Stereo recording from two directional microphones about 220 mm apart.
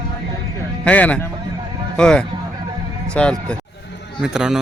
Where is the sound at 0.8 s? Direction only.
5° left (ahead or behind).